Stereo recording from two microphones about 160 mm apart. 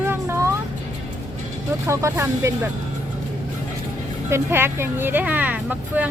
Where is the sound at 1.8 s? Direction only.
20° right (ahead or behind).